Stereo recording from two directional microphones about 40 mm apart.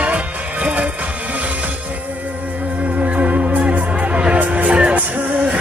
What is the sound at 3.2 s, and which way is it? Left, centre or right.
Music, right.